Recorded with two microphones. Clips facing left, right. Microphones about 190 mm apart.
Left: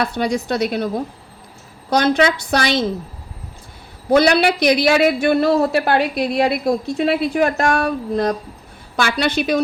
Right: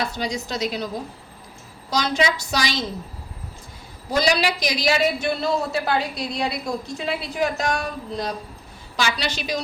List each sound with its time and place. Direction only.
0.0 s a man's voice: 60° left (ahead or behind)
1.9 s a man's voice: 55° left (ahead or behind)
4.1 s a man's voice: 60° left (ahead or behind)